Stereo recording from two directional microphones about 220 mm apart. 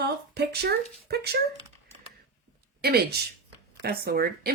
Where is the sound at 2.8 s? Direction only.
45° right (ahead or behind).